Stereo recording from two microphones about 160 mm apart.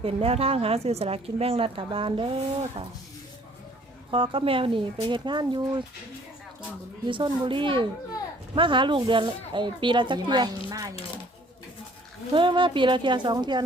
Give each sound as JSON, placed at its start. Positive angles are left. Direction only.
{"t": 0.0, "sound": "speech", "side_deg": -35}
{"t": 4.1, "sound": "speech", "side_deg": -35}
{"t": 7.1, "sound": "speech", "side_deg": -30}
{"t": 12.3, "sound": "speech", "side_deg": -30}